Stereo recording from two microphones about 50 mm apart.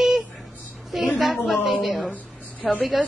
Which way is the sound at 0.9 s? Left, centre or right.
Centre.